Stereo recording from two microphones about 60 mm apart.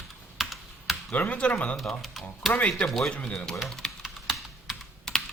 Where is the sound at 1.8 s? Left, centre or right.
Centre.